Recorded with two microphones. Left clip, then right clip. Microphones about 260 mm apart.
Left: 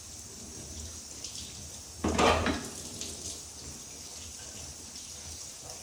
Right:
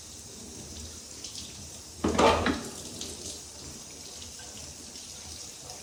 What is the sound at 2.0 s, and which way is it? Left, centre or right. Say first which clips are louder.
Dishes: right 3 dB; centre.